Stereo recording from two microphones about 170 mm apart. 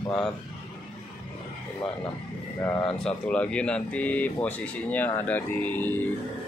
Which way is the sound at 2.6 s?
15° left (ahead or behind).